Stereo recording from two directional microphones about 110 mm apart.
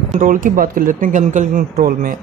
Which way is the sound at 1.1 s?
90° right.